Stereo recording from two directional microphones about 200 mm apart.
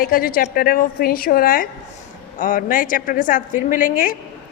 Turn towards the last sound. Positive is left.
turn(degrees=40)  # may be behind; listen again after turning